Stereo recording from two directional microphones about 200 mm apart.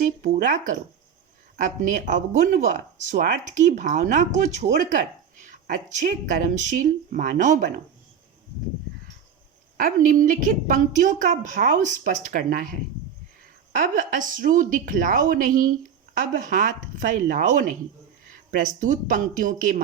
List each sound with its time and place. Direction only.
0.0 s speech: 40° right (ahead or behind)
9.7 s speech: 40° right (ahead or behind)
13.7 s speech: 40° right (ahead or behind)